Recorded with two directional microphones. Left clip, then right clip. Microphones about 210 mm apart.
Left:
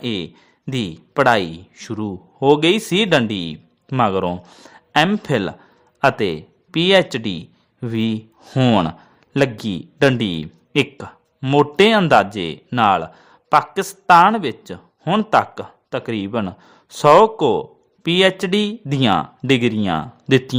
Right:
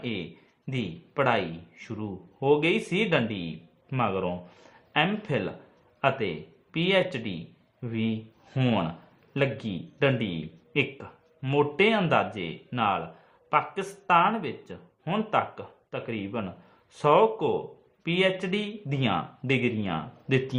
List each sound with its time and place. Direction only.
0.0 s a man's voice: 50° left (ahead or behind)